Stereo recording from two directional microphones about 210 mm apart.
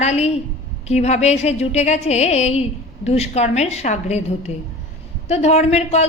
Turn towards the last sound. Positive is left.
turn(degrees=30)  # may be behind; listen again after turning